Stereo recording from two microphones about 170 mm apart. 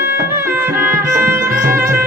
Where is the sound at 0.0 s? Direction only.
15° right (ahead or behind).